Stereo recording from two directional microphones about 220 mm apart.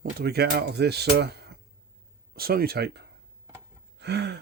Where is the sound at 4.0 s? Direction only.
50° right (ahead or behind).